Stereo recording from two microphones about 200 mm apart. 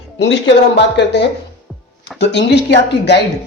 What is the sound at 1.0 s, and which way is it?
Speech, 60° left (ahead or behind).